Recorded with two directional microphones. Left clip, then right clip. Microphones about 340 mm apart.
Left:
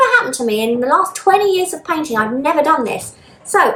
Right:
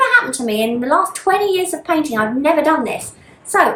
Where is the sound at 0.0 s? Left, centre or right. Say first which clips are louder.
Left 1 dB; centre.